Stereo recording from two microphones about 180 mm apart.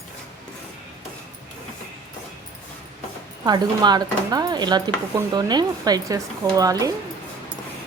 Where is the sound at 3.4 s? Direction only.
25° right (ahead or behind).